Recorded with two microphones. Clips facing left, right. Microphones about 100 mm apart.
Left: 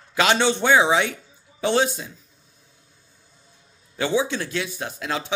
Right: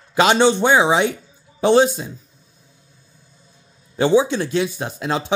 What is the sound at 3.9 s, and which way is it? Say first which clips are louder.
Speech: right 7 dB; 30° right (ahead or behind).